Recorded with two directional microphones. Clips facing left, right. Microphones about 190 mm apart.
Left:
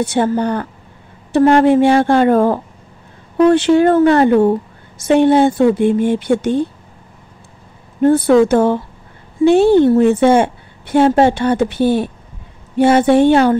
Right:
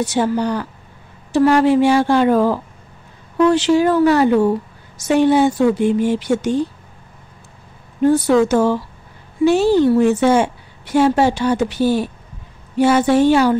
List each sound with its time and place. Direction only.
0.0 s a woman's voice: 55° left (ahead or behind)
8.0 s a woman's voice: 55° left (ahead or behind)